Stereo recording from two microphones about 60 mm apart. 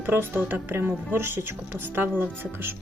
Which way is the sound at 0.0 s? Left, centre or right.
Right.